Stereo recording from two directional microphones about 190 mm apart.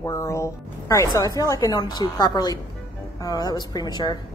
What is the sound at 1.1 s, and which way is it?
A woman's voice, 15° left (ahead or behind).